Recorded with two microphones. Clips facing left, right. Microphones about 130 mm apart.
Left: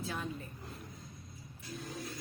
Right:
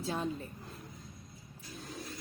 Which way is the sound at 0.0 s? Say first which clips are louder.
Right 4 dB; 30° right (ahead or behind).